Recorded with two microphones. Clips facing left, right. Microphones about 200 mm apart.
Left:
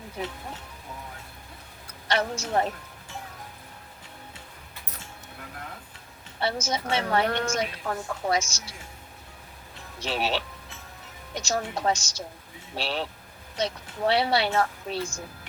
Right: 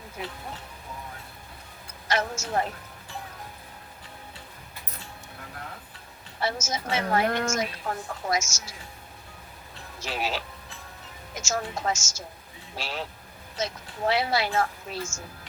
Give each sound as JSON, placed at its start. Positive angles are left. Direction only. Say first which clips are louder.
{"t": 2.0, "sound": "speech", "louder": "left 1 dB", "side_deg": 35}
{"t": 6.4, "sound": "speech", "louder": "left 2 dB", "side_deg": 35}
{"t": 10.0, "sound": "speech", "louder": "left 3 dB", "side_deg": 30}